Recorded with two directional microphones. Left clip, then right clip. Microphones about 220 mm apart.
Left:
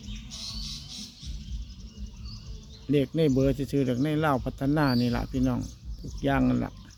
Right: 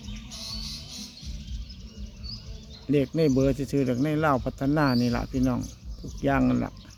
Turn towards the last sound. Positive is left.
turn(degrees=0)  # may be behind; listen again after turning